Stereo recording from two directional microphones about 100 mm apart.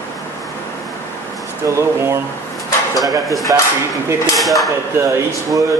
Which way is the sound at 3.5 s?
30° right (ahead or behind).